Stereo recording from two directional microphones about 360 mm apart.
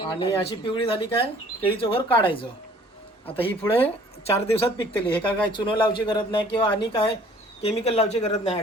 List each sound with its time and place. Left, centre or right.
0.0 s speech: centre